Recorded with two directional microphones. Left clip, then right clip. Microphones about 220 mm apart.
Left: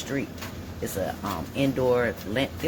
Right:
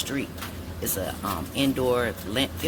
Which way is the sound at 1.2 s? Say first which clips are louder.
Right 4 dB; 20° right (ahead or behind).